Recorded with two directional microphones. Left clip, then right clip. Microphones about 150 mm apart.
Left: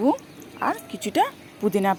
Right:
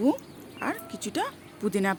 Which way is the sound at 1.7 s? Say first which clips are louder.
Left 5 dB; centre (ahead or behind).